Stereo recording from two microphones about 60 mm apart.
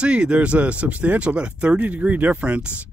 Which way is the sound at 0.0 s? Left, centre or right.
Centre.